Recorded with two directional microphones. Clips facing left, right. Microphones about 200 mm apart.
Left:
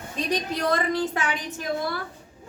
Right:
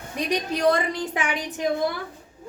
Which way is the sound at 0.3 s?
15° right (ahead or behind).